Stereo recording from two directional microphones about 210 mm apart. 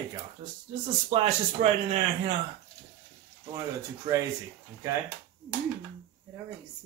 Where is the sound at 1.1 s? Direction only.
30° right (ahead or behind).